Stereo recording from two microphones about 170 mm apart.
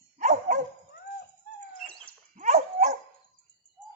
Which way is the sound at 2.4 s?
40° right (ahead or behind).